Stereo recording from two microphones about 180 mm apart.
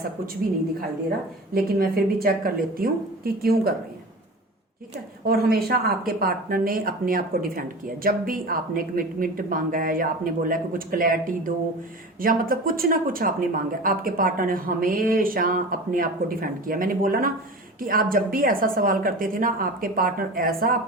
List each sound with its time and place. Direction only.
1.5 s a woman's voice: 55° right (ahead or behind)
5.2 s speech: 60° right (ahead or behind)